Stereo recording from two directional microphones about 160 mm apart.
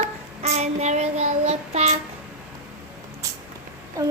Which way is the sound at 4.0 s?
20° right (ahead or behind).